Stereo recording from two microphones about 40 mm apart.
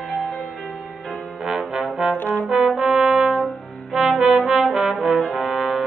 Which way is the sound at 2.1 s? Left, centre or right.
Left.